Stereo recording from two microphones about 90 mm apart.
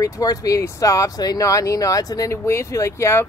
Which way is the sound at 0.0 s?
40° left (ahead or behind).